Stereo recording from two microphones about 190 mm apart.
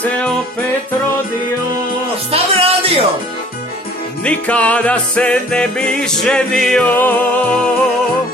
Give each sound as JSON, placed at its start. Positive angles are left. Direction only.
{"t": 0.0, "sound": "music", "side_deg": 5}
{"t": 2.3, "sound": "music", "side_deg": -30}
{"t": 4.2, "sound": "music", "side_deg": 5}